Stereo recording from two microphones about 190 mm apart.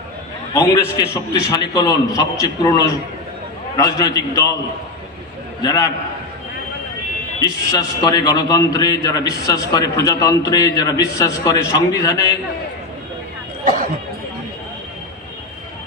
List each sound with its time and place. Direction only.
0.6 s a man's voice: 15° left (ahead or behind)
5.6 s a man's voice: 20° left (ahead or behind)
7.4 s a man's voice: 20° left (ahead or behind)